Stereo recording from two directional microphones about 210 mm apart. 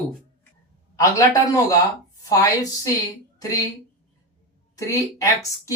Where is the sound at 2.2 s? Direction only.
15° left (ahead or behind).